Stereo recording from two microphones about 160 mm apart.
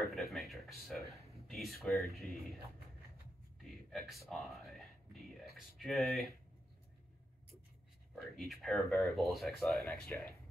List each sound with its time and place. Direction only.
0.0 s a sound: centre (ahead or behind)
1.3 s speech: centre (ahead or behind)
3.6 s speech: centre (ahead or behind)
8.1 s speech: centre (ahead or behind)
10.0 s speech: 15° left (ahead or behind)